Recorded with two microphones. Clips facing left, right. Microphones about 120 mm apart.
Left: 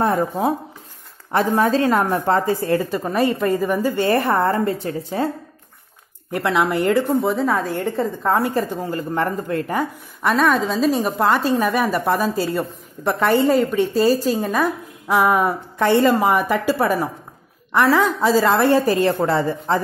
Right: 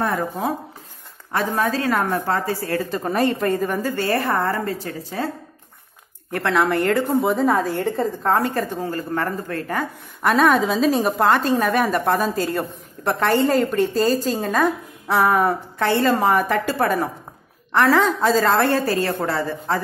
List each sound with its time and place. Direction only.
1.3 s a woman's voice: 25° left (ahead or behind)
3.0 s a woman's voice: centre (ahead or behind)
4.1 s a woman's voice: 30° left (ahead or behind)
6.3 s a woman's voice: 10° left (ahead or behind)
10.2 s a woman's voice: centre (ahead or behind); by 16.2 s 15° left (ahead or behind)
16.2 s a woman's voice: 5° left (ahead or behind)
19.0 s a woman's voice: 25° left (ahead or behind)